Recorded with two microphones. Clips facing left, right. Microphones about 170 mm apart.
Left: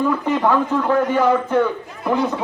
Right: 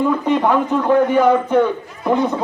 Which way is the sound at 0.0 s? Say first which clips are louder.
Right 2 dB; 20° right (ahead or behind).